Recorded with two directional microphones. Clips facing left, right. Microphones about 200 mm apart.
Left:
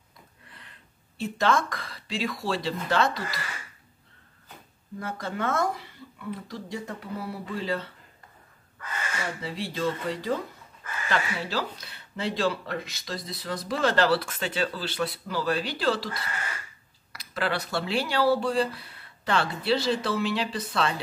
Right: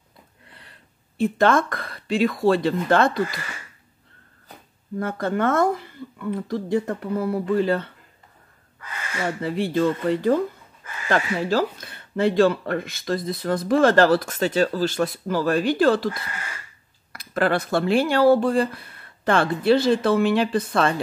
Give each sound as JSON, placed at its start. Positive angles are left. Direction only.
{"t": 1.1, "sound": "speech", "side_deg": -55}
{"t": 4.9, "sound": "speech", "side_deg": -55}
{"t": 9.4, "sound": "speech", "side_deg": -55}